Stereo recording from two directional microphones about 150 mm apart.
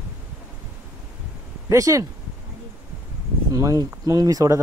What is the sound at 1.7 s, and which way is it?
Speech, 20° right (ahead or behind).